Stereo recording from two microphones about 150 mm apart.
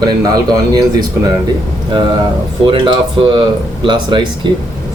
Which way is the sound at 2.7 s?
30° right (ahead or behind).